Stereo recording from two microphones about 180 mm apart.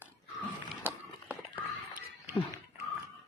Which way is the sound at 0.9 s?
10° right (ahead or behind).